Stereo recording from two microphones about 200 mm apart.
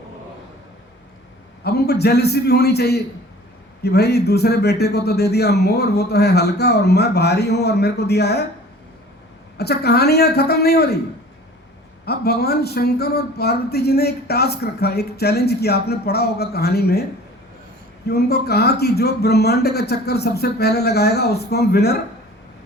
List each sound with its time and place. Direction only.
1.6 s speech: 55° left (ahead or behind)
9.6 s speech: 55° left (ahead or behind)
12.0 s speech: 55° left (ahead or behind)
18.1 s speech: 55° left (ahead or behind)